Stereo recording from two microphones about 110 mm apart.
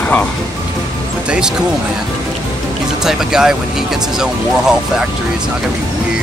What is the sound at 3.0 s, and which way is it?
Speech, 5° right (ahead or behind).